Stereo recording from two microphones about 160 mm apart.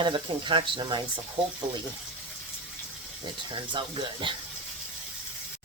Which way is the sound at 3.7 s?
30° right (ahead or behind).